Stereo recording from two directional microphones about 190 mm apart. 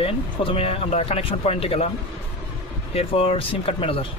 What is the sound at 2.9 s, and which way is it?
Speech, 30° left (ahead or behind).